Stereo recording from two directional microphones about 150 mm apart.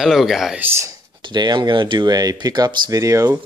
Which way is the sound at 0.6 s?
20° right (ahead or behind).